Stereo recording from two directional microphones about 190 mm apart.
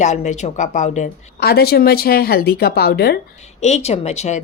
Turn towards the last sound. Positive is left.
turn(degrees=35)  # may be behind; listen again after turning